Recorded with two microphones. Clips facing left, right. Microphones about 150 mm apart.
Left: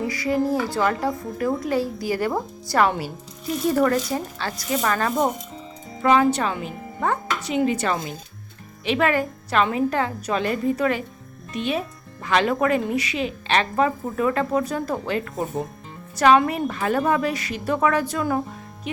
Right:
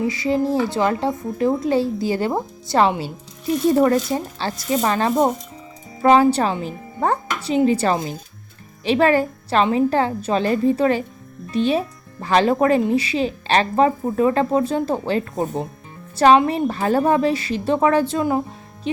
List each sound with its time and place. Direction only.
0.1 s a woman's voice: 25° right (ahead or behind)